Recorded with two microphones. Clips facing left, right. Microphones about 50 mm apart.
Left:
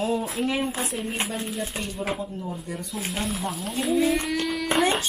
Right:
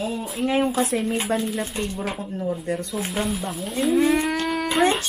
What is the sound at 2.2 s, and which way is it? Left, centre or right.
Speech, right.